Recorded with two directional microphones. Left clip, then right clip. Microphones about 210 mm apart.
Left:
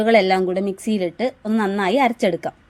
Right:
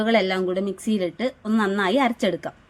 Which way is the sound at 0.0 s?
25° left (ahead or behind).